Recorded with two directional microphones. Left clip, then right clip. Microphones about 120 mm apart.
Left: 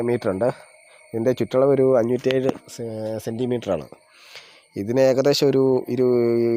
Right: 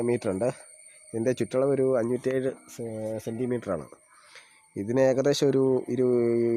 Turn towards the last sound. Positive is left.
turn(degrees=0)  # may be behind; listen again after turning